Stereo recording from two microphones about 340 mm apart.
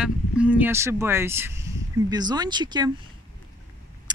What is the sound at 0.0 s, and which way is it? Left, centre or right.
Speech, centre.